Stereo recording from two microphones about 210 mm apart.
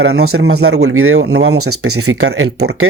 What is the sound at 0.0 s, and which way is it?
Speech, 50° right (ahead or behind).